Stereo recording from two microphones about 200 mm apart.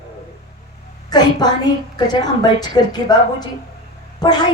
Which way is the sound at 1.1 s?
20° left (ahead or behind).